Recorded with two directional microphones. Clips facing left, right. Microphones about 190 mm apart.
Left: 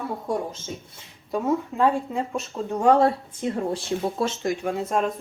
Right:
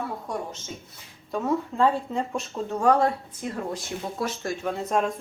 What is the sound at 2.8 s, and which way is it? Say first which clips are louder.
Speech: left 3 dB; 25° left (ahead or behind).